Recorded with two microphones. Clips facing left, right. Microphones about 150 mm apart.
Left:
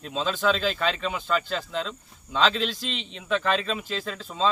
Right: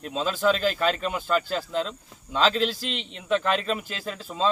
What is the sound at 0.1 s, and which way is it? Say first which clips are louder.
A man's voice: right 1 dB; 5° right (ahead or behind).